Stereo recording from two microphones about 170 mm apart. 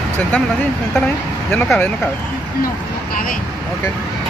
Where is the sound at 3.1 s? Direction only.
55° left (ahead or behind).